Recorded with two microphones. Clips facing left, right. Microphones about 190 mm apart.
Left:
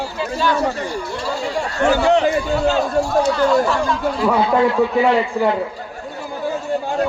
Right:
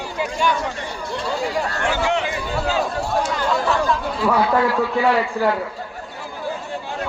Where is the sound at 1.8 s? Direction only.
40° left (ahead or behind).